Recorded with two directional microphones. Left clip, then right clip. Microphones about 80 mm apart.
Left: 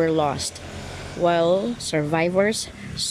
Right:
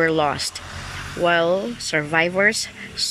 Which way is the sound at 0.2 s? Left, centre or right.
Left.